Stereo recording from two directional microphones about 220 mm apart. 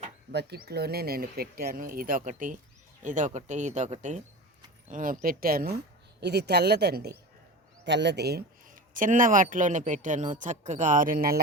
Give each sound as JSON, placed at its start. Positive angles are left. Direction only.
{"t": 0.3, "sound": "a man's voice", "side_deg": -50}